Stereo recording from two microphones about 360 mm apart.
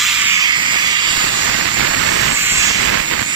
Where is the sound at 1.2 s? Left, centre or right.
Right.